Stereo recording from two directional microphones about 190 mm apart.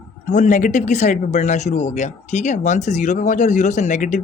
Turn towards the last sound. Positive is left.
turn(degrees=40)  # may be behind; listen again after turning